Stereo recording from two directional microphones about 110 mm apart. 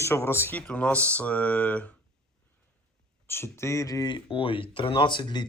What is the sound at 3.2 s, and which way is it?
Speech, 20° left (ahead or behind).